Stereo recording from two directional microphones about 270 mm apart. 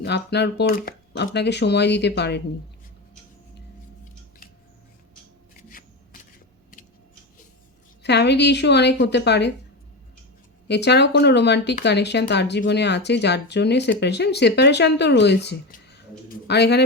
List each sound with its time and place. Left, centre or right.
0.0 s speech: left
8.0 s speech: left
10.7 s speech: left